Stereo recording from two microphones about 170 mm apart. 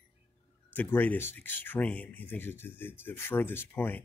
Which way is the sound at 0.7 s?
10° left (ahead or behind).